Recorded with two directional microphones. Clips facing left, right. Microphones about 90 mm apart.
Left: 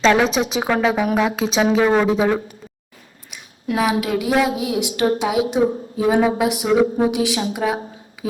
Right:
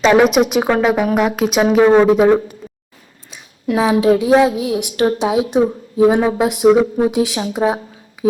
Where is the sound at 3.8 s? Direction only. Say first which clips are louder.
Right 7 dB; 25° right (ahead or behind).